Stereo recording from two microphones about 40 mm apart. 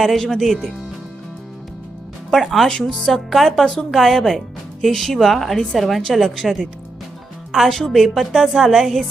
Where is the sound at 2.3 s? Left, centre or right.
Centre.